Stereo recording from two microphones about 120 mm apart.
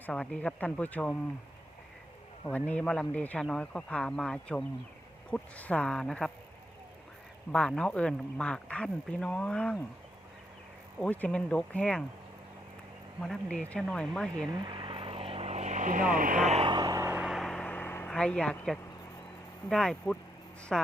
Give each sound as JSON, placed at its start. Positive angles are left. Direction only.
{"t": 0.0, "sound": "speech", "side_deg": 10}
{"t": 2.5, "sound": "speech", "side_deg": 10}
{"t": 7.5, "sound": "speech", "side_deg": 5}
{"t": 11.0, "sound": "speech", "side_deg": 10}
{"t": 13.2, "sound": "speech", "side_deg": 5}
{"t": 14.6, "sound": "vehicle", "side_deg": -40}
{"t": 16.6, "sound": "a sound", "side_deg": -40}
{"t": 17.2, "sound": "vehicle", "side_deg": 0}
{"t": 18.1, "sound": "speech", "side_deg": 5}